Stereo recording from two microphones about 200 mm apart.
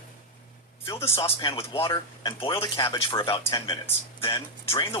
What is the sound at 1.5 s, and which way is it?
Speech, 30° left (ahead or behind).